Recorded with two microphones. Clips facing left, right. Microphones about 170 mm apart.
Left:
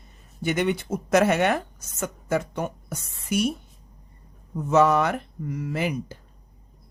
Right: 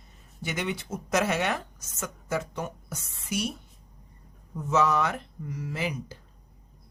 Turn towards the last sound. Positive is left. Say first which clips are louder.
# left 5 dB
turn(degrees=55)  # may be behind; listen again after turning